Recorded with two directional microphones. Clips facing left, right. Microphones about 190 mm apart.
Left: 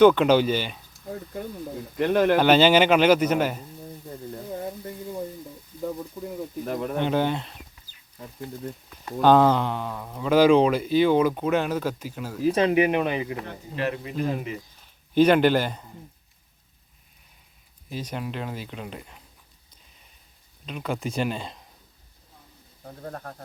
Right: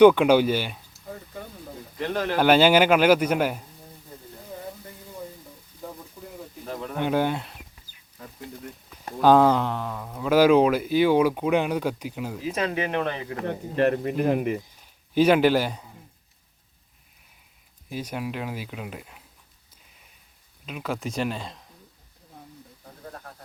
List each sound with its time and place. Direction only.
0.0 s speech: 10° right (ahead or behind)
2.0 s speech: 55° left (ahead or behind)
2.4 s speech: 10° right (ahead or behind)
7.0 s speech: 10° right (ahead or behind)
9.2 s speech: 5° right (ahead or behind)
12.5 s speech: 30° left (ahead or behind)
12.7 s speech: 15° left (ahead or behind)
13.4 s speech: 55° right (ahead or behind)
15.1 s speech: 5° right (ahead or behind)
17.8 s speech: 10° right (ahead or behind)
20.7 s speech: 5° right (ahead or behind)
22.8 s bird: 40° left (ahead or behind)